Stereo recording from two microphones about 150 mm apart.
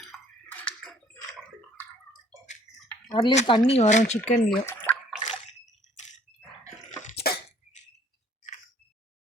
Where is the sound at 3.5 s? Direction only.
35° left (ahead or behind).